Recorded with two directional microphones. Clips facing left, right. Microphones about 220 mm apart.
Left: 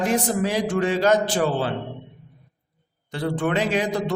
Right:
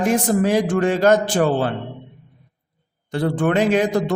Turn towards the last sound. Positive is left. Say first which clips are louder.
# right 5 dB
turn(degrees=-50)  # may be behind; listen again after turning